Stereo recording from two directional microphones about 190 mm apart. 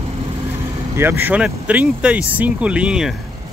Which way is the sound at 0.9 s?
10° right (ahead or behind).